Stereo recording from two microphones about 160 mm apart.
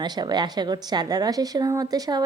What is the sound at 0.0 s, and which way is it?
A woman's voice, 25° right (ahead or behind).